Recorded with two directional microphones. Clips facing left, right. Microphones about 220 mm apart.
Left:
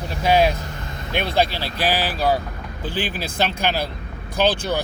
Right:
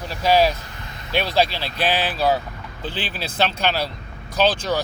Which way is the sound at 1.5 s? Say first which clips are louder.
Even; 15° left (ahead or behind).